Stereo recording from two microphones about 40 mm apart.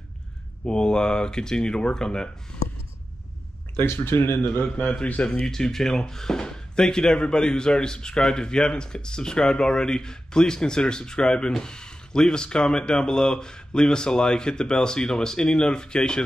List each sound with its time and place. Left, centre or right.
0.7 s speech: centre
3.7 s speech: left
5.4 s speech: centre